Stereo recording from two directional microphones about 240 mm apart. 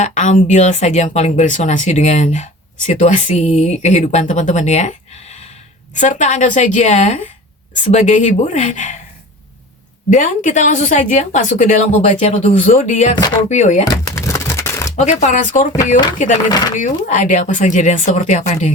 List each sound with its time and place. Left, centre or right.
0.0 s speech: left
10.1 s speech: left
13.8 s crumpling: centre
14.9 s speech: left
16.5 s speech: centre
16.7 s speech: left